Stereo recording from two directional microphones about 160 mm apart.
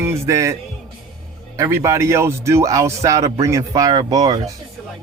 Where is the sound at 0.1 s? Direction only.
20° right (ahead or behind).